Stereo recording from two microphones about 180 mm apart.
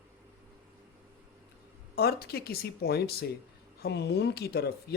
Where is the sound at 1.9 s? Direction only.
65° left (ahead or behind).